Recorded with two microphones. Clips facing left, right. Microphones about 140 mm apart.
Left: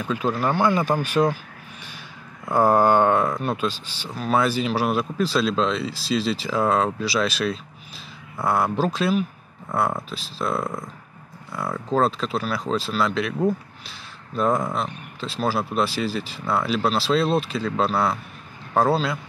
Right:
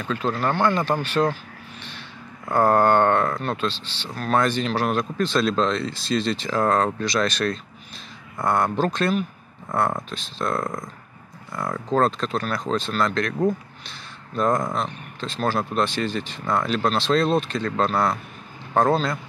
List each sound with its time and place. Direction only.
0.0 s speech: 10° left (ahead or behind)
2.4 s a man's voice: 10° left (ahead or behind)